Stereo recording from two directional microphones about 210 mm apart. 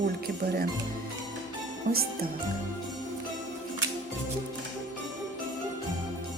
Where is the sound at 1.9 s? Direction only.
45° right (ahead or behind).